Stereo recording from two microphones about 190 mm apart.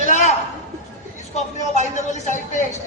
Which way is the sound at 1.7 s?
40° left (ahead or behind).